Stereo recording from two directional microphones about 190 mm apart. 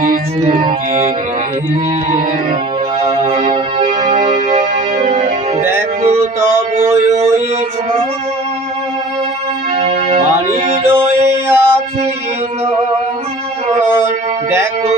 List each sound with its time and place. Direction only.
0.4 s music: 30° right (ahead or behind)
3.8 s music: 40° right (ahead or behind)
4.2 s music: 25° right (ahead or behind)
4.5 s music: 40° right (ahead or behind)
6.4 s a sound: 15° right (ahead or behind)
9.8 s music: 30° right (ahead or behind)
10.8 s music: 10° right (ahead or behind)
11.3 s mantra: 10° right (ahead or behind)